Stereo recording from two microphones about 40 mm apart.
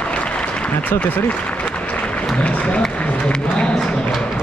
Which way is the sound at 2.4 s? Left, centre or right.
Left.